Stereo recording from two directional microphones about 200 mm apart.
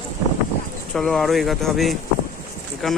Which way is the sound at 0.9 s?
Centre (ahead or behind).